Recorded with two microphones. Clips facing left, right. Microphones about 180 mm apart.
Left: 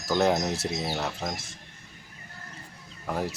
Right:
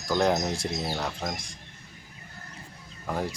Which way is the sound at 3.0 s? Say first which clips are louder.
Even; centre (ahead or behind).